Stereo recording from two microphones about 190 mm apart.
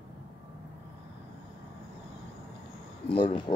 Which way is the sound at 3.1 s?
30° left (ahead or behind).